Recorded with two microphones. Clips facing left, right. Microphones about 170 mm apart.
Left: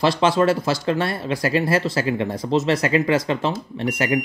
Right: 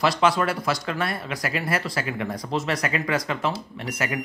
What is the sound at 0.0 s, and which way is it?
Speech, 25° left (ahead or behind).